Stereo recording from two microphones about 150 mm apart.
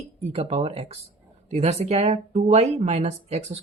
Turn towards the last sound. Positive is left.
turn(degrees=-45)  # may be behind; listen again after turning